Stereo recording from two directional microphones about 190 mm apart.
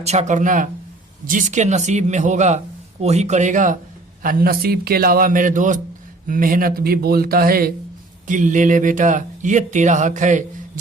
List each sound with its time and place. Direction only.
0.0 s a man's voice: 35° right (ahead or behind)